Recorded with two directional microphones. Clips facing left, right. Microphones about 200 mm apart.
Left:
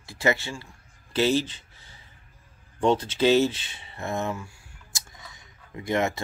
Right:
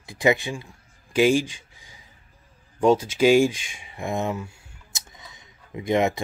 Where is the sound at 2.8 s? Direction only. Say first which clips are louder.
Right 4 dB; 10° right (ahead or behind).